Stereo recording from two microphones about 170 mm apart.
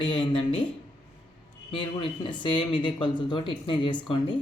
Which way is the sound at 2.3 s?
30° left (ahead or behind).